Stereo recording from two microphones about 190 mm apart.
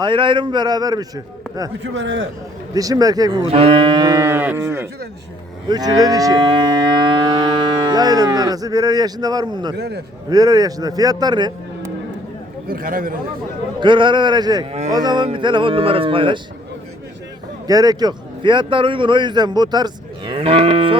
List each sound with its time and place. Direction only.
0.0 s a man's voice: 25° right (ahead or behind)
1.8 s a man's voice: 75° right (ahead or behind)
2.7 s a man's voice: 20° right (ahead or behind)
5.6 s cattle: 20° right (ahead or behind)
7.9 s a man's voice: 20° right (ahead or behind)
9.7 s a man's voice: 60° right (ahead or behind)
10.2 s a man's voice: 20° right (ahead or behind)
12.6 s a man's voice: 45° right (ahead or behind)
13.7 s a man's voice: 25° right (ahead or behind)
14.7 s a sound: 35° right (ahead or behind)
14.9 s a man's voice: 25° right (ahead or behind)
17.7 s a man's voice: 20° right (ahead or behind)